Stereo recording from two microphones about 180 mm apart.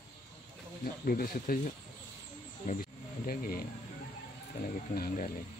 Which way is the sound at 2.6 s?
50° left (ahead or behind).